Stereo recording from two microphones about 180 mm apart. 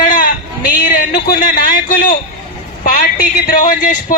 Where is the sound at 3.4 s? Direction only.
45° left (ahead or behind).